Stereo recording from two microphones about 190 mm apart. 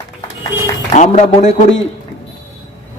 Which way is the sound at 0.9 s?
40° left (ahead or behind).